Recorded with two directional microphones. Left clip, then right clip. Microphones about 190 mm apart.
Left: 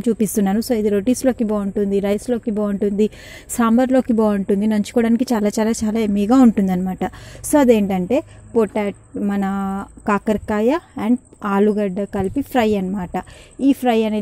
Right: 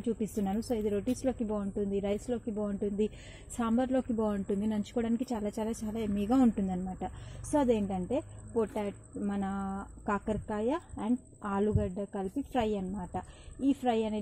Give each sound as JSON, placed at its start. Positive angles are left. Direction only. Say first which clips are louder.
{"t": 0.0, "sound": "speech", "louder": "left 15 dB", "side_deg": 45}